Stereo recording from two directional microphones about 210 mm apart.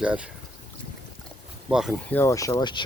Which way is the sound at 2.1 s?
10° left (ahead or behind).